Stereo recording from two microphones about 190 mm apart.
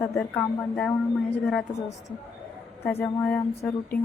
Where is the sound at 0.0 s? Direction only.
10° left (ahead or behind).